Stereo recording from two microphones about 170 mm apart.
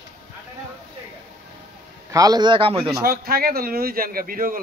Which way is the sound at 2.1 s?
20° right (ahead or behind).